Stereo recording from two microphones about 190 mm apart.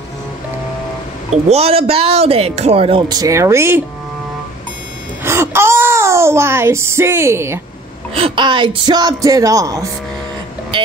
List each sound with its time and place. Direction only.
1.3 s speech: 35° right (ahead or behind); by 3.8 s 15° right (ahead or behind)
5.2 s a sound: 15° right (ahead or behind)
8.1 s speech: 25° right (ahead or behind)